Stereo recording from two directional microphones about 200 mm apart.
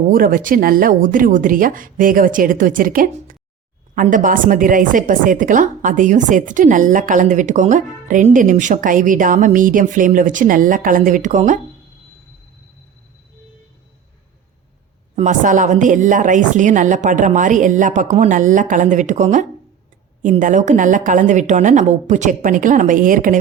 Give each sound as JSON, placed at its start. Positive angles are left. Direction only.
{"t": 0.1, "sound": "a woman's voice", "side_deg": -45}
{"t": 15.1, "sound": "a woman's voice", "side_deg": -40}